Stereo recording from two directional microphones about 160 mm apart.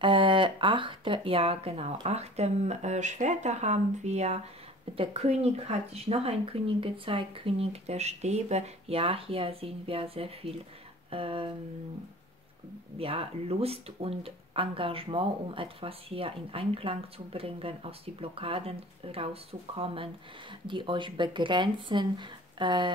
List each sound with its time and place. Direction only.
0.0 s speech: 30° right (ahead or behind)
12.9 s speech: 35° right (ahead or behind)